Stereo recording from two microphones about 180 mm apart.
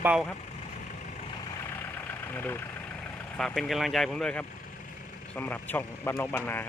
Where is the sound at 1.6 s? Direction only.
15° left (ahead or behind).